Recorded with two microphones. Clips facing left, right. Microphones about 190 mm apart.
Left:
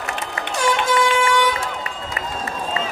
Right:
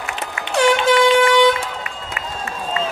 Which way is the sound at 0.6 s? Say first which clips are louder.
Right 5 dB; 70° right (ahead or behind).